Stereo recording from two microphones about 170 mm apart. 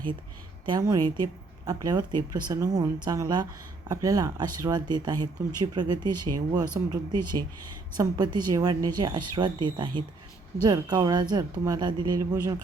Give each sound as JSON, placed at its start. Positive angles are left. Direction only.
{"t": 0.6, "sound": "a woman's voice", "side_deg": -25}